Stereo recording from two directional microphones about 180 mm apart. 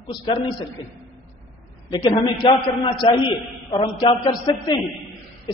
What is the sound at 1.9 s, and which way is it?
A man's voice, 25° left (ahead or behind).